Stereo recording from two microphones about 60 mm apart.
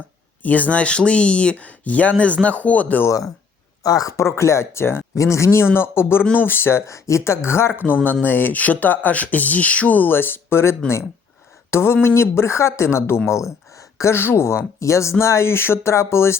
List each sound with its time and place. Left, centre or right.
0.4 s speech: left
3.8 s speech: left
4.2 s speech: left
5.1 s speech: left
6.8 s speech: left
13.7 s a sound: left
14.2 s speech: left
14.8 s speech: left